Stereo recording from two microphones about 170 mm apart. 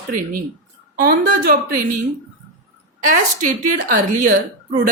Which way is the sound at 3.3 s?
50° right (ahead or behind).